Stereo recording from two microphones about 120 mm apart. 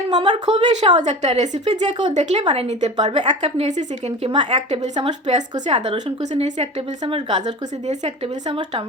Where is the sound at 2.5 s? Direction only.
65° right (ahead or behind).